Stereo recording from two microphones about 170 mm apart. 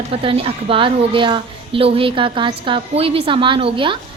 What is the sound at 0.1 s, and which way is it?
A woman's voice, 35° right (ahead or behind).